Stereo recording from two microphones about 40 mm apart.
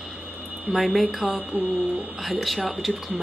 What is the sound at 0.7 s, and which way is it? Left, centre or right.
Speech, centre.